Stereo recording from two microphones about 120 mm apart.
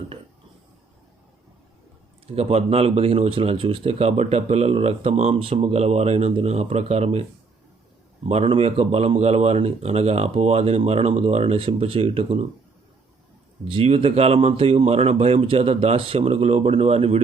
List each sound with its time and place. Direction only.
2.2 s speech: 60° right (ahead or behind)
8.3 s speech: 60° right (ahead or behind)
13.7 s speech: 55° right (ahead or behind)